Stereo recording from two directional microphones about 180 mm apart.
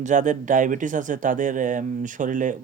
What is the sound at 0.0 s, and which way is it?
Speech, 45° right (ahead or behind).